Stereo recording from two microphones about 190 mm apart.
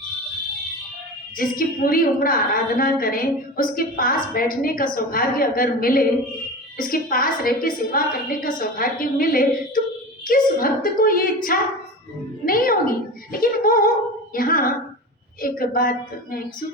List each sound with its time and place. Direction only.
1.4 s a woman's voice: 50° left (ahead or behind)